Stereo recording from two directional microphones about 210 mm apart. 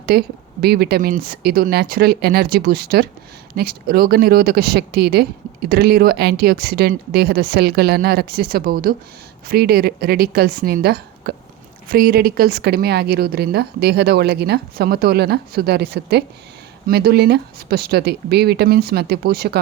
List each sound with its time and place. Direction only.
0.0 s a woman's voice: 50° right (ahead or behind)